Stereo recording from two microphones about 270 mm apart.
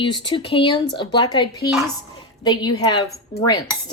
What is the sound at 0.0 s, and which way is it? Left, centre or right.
Speech, centre.